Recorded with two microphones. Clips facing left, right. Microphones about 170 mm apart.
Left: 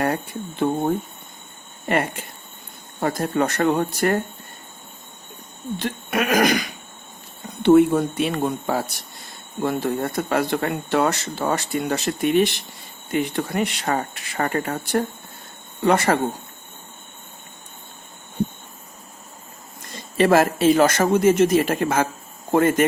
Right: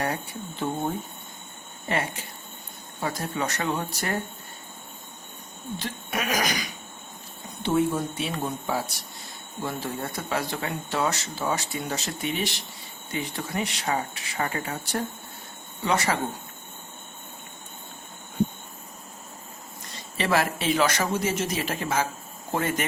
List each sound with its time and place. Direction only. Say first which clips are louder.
0.6 s speech: left 7 dB; 60° left (ahead or behind)
1.9 s a man's voice: left 6 dB; 55° left (ahead or behind)
5.8 s speech: left 8 dB; 60° left (ahead or behind)
7.6 s speech: left 10 dB; 60° left (ahead or behind)
20.1 s a man's voice: left 8 dB; 45° left (ahead or behind)